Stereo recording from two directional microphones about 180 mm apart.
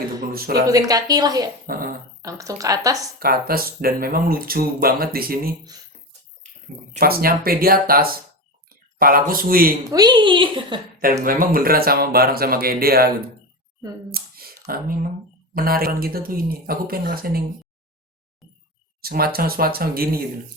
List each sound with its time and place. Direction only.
0.3 s speech: 55° right (ahead or behind)
0.7 s a woman's voice: 20° right (ahead or behind)
1.6 s speech: 55° right (ahead or behind)
2.2 s a woman's voice: 20° right (ahead or behind)
3.2 s speech: 55° right (ahead or behind)
7.0 s a man's voice: 55° right (ahead or behind)
9.9 s a woman's voice: 20° right (ahead or behind)
11.2 s speech: 50° right (ahead or behind)
14.1 s a sound: 55° right (ahead or behind)
15.5 s speech: 55° right (ahead or behind)
18.4 s chink: centre (ahead or behind)
19.0 s speech: 55° right (ahead or behind)